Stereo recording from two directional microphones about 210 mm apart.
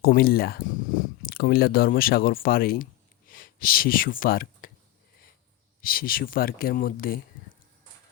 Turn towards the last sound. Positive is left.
turn(degrees=40)  # may be behind; listen again after turning